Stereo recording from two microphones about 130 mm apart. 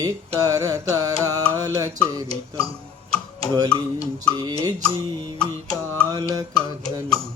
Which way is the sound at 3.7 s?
35° left (ahead or behind).